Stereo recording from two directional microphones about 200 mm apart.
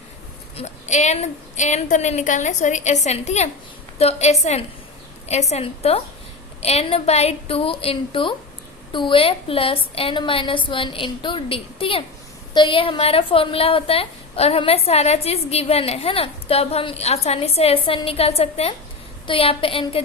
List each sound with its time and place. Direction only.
0.5 s a woman's voice: 35° left (ahead or behind)